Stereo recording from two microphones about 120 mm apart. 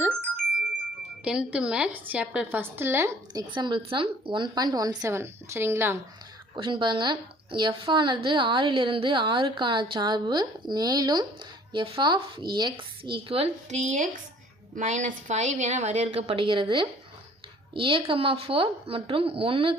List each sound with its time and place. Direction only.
1.2 s a woman's voice: 10° right (ahead or behind)
3.3 s a woman's voice: 40° right (ahead or behind); by 6.0 s 20° right (ahead or behind)
6.6 s a woman's voice: 40° right (ahead or behind)
11.7 s speech: 45° right (ahead or behind)
13.7 s a woman's voice: 75° right (ahead or behind); by 19.7 s 50° right (ahead or behind)